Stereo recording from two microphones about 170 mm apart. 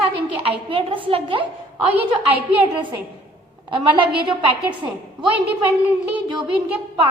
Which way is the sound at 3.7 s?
30° right (ahead or behind).